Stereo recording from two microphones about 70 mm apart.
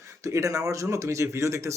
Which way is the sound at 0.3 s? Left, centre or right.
Right.